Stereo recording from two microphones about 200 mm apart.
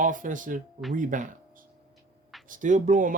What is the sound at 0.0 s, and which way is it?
Speech, 40° right (ahead or behind).